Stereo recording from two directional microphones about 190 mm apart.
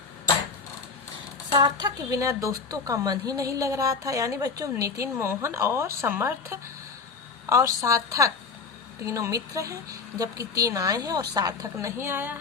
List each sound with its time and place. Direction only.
1.5 s a woman's voice: 25° right (ahead or behind)
7.8 s a woman's voice: 15° right (ahead or behind)